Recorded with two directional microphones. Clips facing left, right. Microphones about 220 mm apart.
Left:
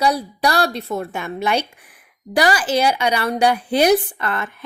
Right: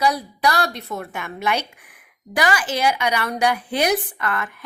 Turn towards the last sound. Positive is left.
turn(degrees=30)  # may be behind; listen again after turning